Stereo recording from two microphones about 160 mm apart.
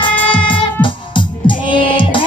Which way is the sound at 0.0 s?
30° left (ahead or behind).